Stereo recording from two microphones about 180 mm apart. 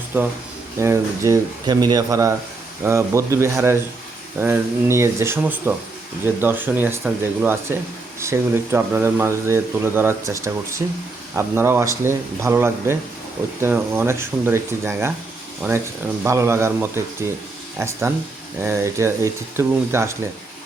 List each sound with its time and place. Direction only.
0.1 s speech: 10° right (ahead or behind)
16.2 s speech: 15° right (ahead or behind)